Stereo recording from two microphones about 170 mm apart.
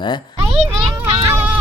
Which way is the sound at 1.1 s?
20° right (ahead or behind).